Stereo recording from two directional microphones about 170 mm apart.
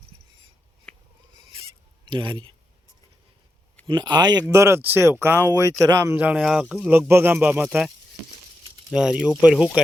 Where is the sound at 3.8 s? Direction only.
25° right (ahead or behind); by 7.9 s 5° right (ahead or behind).